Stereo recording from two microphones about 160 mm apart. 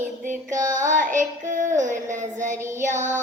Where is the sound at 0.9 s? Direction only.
55° right (ahead or behind).